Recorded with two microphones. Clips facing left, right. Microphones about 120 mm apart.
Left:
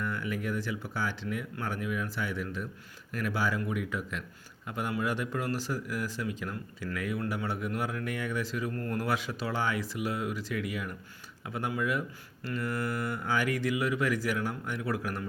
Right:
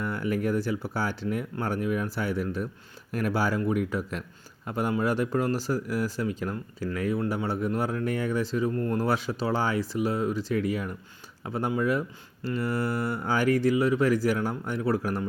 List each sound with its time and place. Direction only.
0.0 s speech: 40° right (ahead or behind)